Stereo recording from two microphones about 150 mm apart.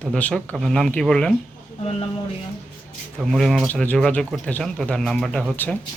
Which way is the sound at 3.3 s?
Centre (ahead or behind).